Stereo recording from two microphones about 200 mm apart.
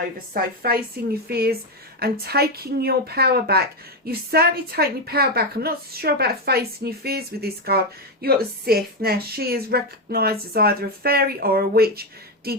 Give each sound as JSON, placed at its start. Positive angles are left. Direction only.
{"t": 0.3, "sound": "a woman's voice", "side_deg": -50}